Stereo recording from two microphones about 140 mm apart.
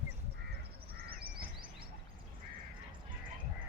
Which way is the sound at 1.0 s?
90° right.